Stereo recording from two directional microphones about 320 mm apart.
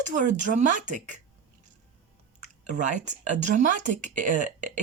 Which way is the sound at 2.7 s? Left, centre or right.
Right.